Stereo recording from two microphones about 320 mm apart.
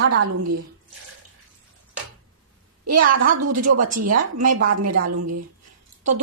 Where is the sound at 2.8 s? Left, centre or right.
Right.